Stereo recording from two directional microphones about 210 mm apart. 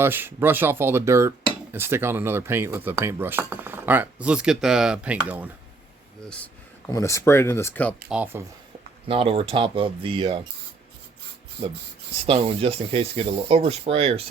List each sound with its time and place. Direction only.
0.0 s speech: 10° right (ahead or behind)
6.2 s speech: 5° left (ahead or behind)
8.1 s speech: 10° right (ahead or behind)
9.0 s speech: 25° right (ahead or behind)
12.2 s speech: 25° right (ahead or behind)